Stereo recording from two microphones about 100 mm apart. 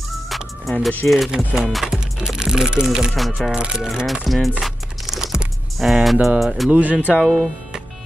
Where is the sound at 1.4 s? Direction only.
10° right (ahead or behind).